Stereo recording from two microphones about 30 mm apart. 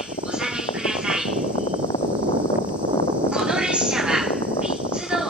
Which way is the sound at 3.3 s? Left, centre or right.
Right.